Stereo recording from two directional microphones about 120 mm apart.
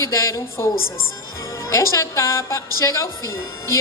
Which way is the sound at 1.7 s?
25° left (ahead or behind).